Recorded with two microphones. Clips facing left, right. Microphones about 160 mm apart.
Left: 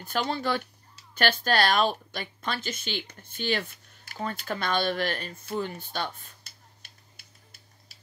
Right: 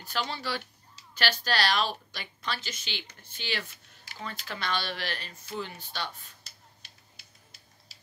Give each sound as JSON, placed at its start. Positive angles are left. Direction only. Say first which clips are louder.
{"t": 0.0, "sound": "speech", "louder": "left 5 dB", "side_deg": 50}